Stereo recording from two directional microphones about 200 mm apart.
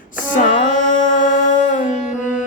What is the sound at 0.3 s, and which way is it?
Music, 40° left (ahead or behind).